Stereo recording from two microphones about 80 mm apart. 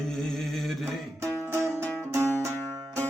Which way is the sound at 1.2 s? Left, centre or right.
Right.